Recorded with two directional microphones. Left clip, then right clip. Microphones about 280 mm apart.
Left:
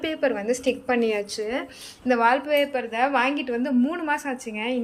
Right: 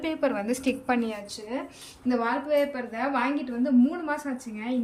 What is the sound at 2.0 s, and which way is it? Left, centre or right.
A woman's voice, centre.